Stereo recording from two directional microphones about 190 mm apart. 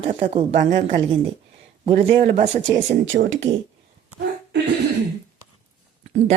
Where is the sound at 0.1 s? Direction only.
35° right (ahead or behind).